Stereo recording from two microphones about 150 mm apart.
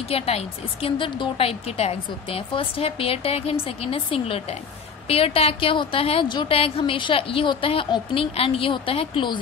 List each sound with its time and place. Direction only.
0.1 s a woman's voice: 40° left (ahead or behind)